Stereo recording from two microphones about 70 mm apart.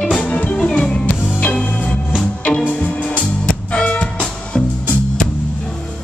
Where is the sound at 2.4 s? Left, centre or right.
Centre.